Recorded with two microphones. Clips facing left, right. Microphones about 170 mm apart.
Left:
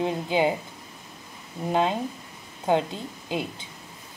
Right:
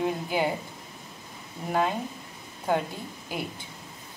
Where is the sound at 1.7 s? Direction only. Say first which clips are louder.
Left 3 dB; 20° left (ahead or behind).